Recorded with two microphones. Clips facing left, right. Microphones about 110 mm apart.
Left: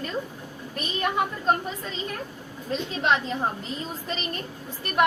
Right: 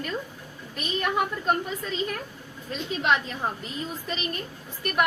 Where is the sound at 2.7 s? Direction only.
30° left (ahead or behind).